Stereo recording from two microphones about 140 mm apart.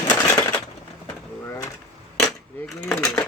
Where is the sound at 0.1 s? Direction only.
30° left (ahead or behind).